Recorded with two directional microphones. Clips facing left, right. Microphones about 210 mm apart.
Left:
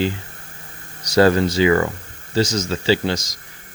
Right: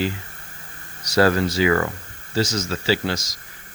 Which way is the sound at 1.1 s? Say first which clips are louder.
Left 3 dB; 25° left (ahead or behind).